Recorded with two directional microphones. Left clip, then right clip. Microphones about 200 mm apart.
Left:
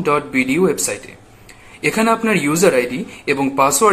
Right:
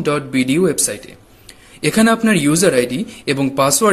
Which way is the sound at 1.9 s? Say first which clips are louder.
Right 1 dB; 40° right (ahead or behind).